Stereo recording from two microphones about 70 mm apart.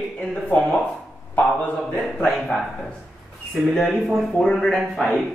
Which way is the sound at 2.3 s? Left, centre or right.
Centre.